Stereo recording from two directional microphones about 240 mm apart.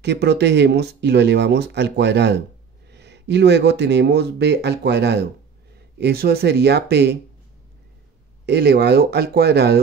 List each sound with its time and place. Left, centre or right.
0.0 s speech: right
8.5 s speech: right